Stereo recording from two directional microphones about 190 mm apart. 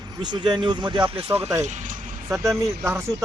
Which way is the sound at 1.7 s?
40° right (ahead or behind).